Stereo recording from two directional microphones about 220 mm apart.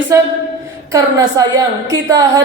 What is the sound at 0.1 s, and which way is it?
A woman's voice, 15° right (ahead or behind).